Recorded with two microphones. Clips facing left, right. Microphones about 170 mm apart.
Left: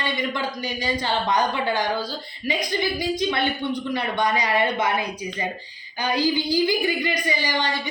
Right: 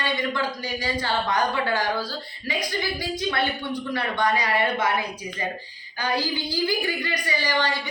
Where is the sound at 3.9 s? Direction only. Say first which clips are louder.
Right 1 dB; 15° left (ahead or behind).